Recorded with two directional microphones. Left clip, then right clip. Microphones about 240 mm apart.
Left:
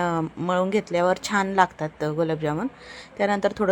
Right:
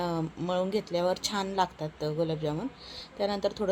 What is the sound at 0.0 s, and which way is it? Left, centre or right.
Speech, centre.